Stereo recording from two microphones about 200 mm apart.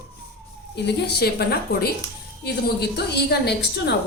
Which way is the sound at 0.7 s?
55° left (ahead or behind).